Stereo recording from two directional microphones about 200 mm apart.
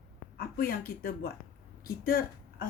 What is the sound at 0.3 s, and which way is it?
Speech, 45° left (ahead or behind).